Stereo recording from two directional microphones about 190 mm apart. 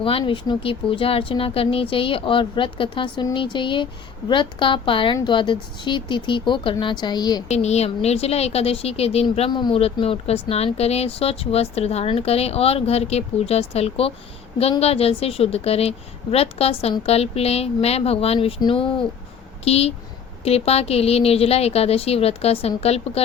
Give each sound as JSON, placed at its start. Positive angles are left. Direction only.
{"t": 0.0, "sound": "speech", "side_deg": 30}
{"t": 7.4, "sound": "speech", "side_deg": 35}